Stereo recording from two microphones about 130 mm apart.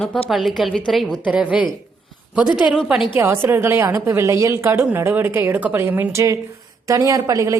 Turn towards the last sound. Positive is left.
turn(degrees=-25)  # may be behind; listen again after turning